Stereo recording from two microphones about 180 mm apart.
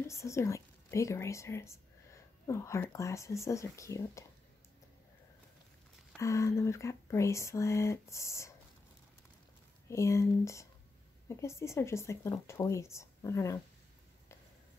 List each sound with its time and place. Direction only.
0.0 s speech: 15° left (ahead or behind)
6.1 s speech: 15° left (ahead or behind)
9.8 s speech: 15° left (ahead or behind)